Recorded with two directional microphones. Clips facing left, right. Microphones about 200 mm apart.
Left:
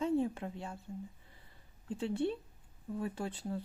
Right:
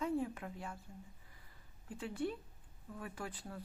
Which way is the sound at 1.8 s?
25° left (ahead or behind).